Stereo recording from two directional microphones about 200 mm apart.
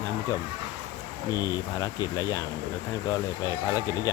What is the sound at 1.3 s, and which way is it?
Speech, 15° left (ahead or behind).